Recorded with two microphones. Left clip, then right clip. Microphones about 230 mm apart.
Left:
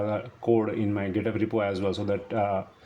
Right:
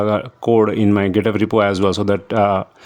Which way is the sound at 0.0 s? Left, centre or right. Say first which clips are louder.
Right 10 dB; right.